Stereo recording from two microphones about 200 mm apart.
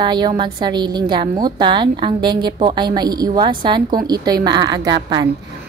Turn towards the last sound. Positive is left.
turn(degrees=-20)  # may be behind; listen again after turning